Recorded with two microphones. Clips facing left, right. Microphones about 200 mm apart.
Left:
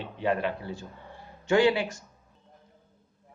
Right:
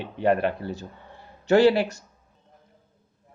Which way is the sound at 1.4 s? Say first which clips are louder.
Right 5 dB; 40° right (ahead or behind).